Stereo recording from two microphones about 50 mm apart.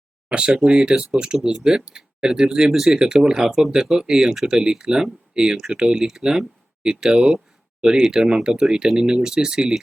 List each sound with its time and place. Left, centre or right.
0.3 s speech: right